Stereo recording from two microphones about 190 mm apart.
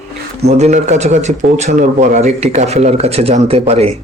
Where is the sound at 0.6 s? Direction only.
35° right (ahead or behind).